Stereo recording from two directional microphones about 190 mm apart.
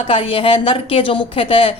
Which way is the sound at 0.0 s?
30° left (ahead or behind).